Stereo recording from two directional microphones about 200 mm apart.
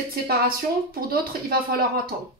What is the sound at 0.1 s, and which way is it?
Speech, 50° right (ahead or behind).